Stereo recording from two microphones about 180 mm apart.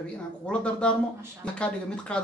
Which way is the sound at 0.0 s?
5° left (ahead or behind).